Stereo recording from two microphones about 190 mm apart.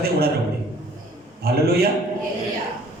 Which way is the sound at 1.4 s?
55° right (ahead or behind).